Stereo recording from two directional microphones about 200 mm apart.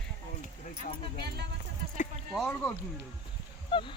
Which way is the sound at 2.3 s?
5° left (ahead or behind).